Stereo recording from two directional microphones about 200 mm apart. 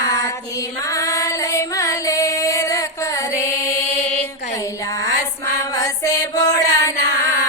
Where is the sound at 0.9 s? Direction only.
15° left (ahead or behind).